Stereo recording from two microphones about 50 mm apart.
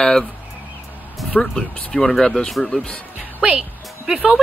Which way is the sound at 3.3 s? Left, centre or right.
Right.